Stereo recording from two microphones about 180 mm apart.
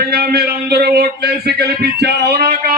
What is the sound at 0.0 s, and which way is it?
Speech, 60° right (ahead or behind).